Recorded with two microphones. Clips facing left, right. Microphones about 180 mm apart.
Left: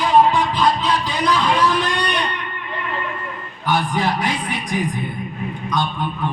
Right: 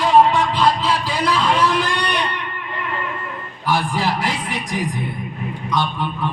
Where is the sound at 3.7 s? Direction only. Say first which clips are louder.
Even; 30° right (ahead or behind).